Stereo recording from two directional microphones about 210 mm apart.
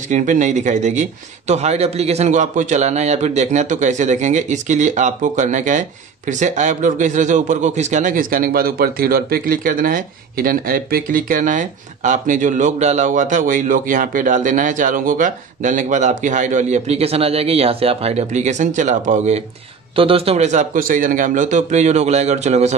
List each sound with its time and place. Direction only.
0.1 s a man's voice: 35° right (ahead or behind)